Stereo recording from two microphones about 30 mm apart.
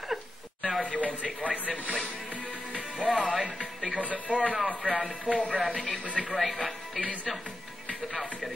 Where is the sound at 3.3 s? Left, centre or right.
Right.